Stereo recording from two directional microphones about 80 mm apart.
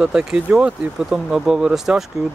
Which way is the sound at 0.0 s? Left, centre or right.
Centre.